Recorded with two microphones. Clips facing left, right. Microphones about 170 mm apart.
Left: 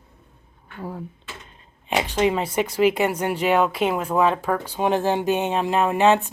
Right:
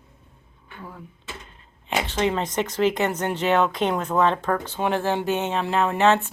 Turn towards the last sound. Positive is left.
turn(degrees=15)  # may be behind; listen again after turning